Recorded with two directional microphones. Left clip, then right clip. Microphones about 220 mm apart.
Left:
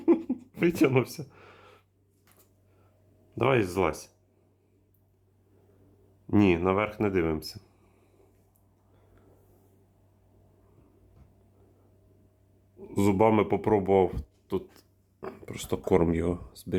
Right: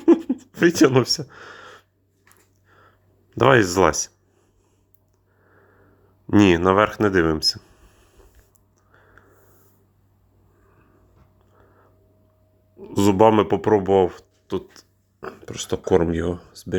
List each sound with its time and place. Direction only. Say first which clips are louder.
0.0 s a sound: right 8 dB; 10° right (ahead or behind)
3.2 s speech: right 10 dB; 15° right (ahead or behind)
6.2 s speech: right 8 dB; 20° right (ahead or behind)
12.8 s speech: right 8 dB; 15° right (ahead or behind)